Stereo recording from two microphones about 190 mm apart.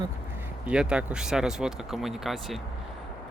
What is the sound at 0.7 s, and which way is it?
Speech, 5° right (ahead or behind).